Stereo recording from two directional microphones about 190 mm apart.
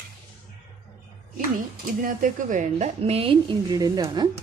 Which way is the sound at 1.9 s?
45° right (ahead or behind).